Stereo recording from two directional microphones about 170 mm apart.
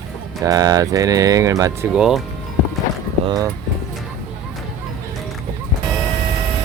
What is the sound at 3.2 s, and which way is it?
Speech, 20° right (ahead or behind).